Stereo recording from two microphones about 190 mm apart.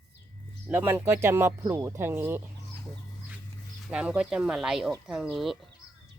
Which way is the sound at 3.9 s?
5° right (ahead or behind).